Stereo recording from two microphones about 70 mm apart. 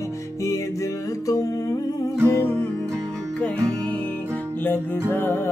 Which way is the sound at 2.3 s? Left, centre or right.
Left.